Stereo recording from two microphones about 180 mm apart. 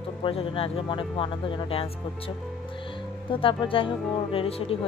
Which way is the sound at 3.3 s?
30° left (ahead or behind).